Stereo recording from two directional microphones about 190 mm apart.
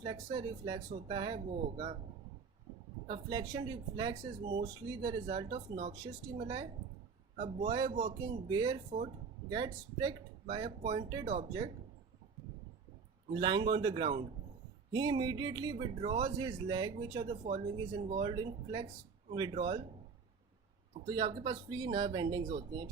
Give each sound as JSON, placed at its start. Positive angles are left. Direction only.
{"t": 0.0, "sound": "speech", "side_deg": -25}
{"t": 3.1, "sound": "speech", "side_deg": -20}
{"t": 13.3, "sound": "speech", "side_deg": -25}
{"t": 21.1, "sound": "speech", "side_deg": -25}